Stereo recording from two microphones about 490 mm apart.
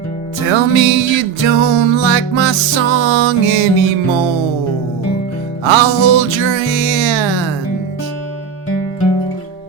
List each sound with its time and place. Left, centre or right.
0.5 s music: right
5.6 s music: right